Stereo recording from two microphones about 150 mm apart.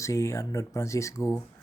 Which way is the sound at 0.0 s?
20° left (ahead or behind).